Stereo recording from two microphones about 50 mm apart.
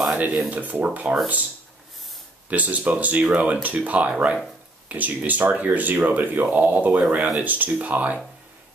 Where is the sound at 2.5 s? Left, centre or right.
Right.